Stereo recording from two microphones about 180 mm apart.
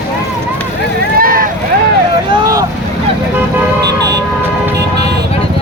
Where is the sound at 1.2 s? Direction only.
50° right (ahead or behind).